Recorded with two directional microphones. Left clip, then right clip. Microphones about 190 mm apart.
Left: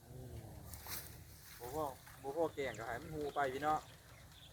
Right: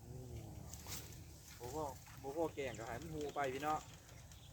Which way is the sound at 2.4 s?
10° left (ahead or behind).